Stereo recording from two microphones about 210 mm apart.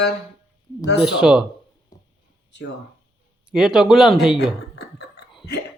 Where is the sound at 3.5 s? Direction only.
Centre (ahead or behind).